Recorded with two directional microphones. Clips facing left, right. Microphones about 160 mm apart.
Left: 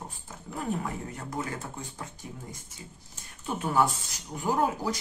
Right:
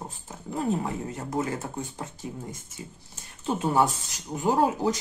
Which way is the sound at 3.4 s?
25° right (ahead or behind).